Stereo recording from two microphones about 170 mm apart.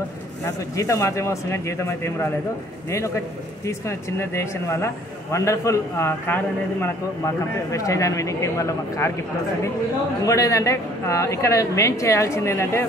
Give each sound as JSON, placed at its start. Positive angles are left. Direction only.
{"t": 0.5, "sound": "a man's voice", "side_deg": 20}
{"t": 3.6, "sound": "a man's voice", "side_deg": 15}
{"t": 10.2, "sound": "a man's voice", "side_deg": 20}